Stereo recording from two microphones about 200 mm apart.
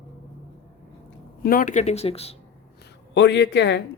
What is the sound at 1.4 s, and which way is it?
Speech, 40° left (ahead or behind).